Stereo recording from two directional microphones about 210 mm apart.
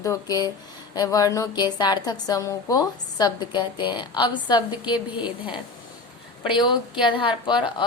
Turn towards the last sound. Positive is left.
turn(degrees=20)  # may be behind; listen again after turning